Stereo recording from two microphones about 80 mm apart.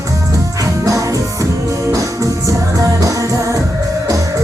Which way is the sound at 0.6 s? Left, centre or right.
Right.